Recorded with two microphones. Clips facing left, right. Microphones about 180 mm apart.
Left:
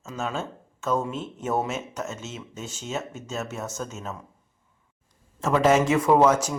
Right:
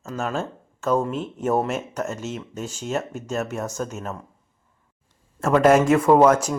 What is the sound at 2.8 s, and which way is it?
Speech, 60° right (ahead or behind).